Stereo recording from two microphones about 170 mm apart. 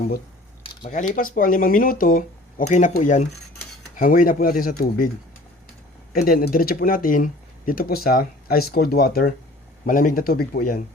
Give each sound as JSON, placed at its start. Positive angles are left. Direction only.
{"t": 0.6, "sound": "keys jangling", "side_deg": 30}
{"t": 1.1, "sound": "speech", "side_deg": 55}
{"t": 6.1, "sound": "speech", "side_deg": 60}